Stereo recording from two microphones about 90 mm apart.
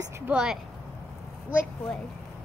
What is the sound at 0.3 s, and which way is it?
Speech, 5° right (ahead or behind).